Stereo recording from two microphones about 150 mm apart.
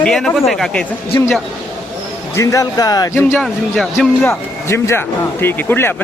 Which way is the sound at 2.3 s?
20° left (ahead or behind).